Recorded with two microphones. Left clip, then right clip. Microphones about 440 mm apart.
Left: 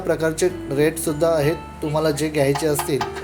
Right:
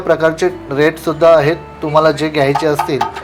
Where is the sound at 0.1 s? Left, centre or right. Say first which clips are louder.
Right 8 dB; left.